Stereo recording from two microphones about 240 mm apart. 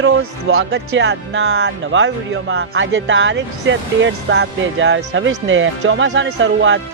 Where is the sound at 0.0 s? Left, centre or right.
Right.